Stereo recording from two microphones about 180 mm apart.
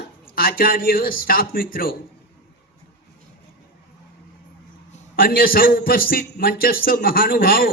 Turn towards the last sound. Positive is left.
turn(degrees=55)  # may be behind; listen again after turning